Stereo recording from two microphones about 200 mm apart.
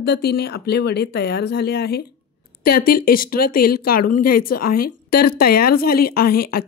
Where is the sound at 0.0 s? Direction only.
55° left (ahead or behind).